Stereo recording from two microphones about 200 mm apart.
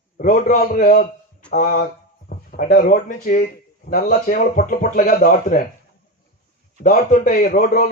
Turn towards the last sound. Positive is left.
turn(degrees=45)  # may be behind; listen again after turning